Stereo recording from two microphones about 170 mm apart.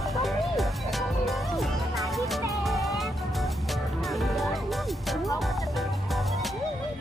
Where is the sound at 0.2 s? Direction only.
Centre (ahead or behind).